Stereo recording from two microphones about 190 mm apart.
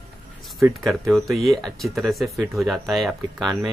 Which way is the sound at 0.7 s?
Centre (ahead or behind).